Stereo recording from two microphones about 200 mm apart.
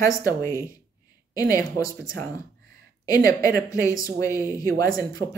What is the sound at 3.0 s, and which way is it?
Speech, 15° left (ahead or behind).